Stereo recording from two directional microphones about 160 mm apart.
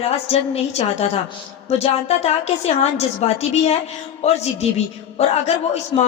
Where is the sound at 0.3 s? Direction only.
40° left (ahead or behind).